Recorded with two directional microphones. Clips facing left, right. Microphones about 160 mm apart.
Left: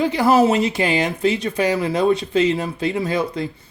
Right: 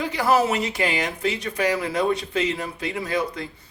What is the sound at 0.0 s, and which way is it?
Speech, 30° left (ahead or behind).